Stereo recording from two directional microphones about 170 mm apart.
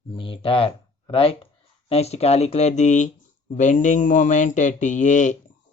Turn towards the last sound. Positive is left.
turn(degrees=45)  # may be behind; listen again after turning